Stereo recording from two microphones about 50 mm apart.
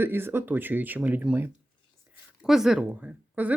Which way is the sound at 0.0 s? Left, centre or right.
Right.